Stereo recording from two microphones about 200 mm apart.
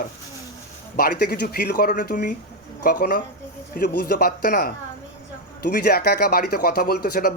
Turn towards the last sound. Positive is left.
turn(degrees=50)  # may be behind; listen again after turning